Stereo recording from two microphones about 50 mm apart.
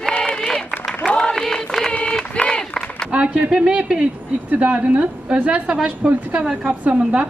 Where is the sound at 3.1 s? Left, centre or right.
Right.